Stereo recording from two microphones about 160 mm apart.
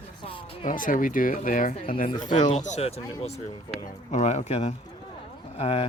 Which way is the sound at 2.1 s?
25° left (ahead or behind).